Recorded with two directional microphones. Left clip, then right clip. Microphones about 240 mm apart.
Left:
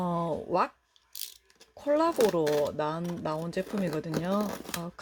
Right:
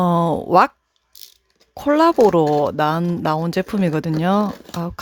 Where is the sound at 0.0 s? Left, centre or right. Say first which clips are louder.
Right 13 dB; right.